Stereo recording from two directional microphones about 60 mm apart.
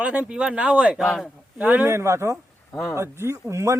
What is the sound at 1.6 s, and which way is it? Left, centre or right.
Speech, right.